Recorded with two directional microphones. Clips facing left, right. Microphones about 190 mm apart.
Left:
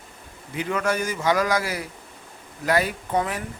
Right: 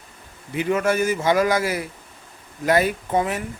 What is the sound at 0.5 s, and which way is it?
Speech, 20° right (ahead or behind).